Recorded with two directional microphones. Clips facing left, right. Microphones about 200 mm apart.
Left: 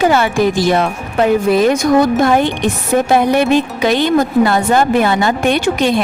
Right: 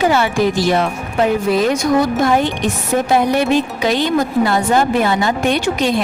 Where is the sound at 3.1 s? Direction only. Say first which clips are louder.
Left 2 dB; 60° left (ahead or behind).